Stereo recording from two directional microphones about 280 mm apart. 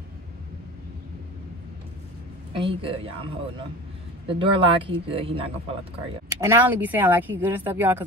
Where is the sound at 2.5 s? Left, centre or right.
Centre.